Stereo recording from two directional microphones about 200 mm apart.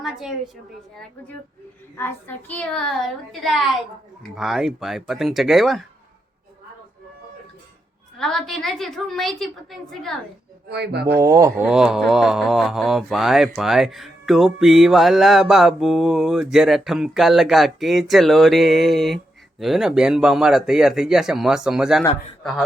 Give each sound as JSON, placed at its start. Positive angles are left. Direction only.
{"t": 0.0, "sound": "a sound", "side_deg": 0}
{"t": 2.0, "sound": "speech", "side_deg": 10}
{"t": 8.2, "sound": "speech", "side_deg": 0}
{"t": 10.7, "sound": "speech", "side_deg": -55}
{"t": 11.2, "sound": "speech", "side_deg": -15}
{"t": 11.6, "sound": "speech", "side_deg": -5}